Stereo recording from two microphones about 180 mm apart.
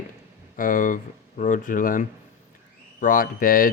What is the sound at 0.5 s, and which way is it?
Speech, 50° left (ahead or behind).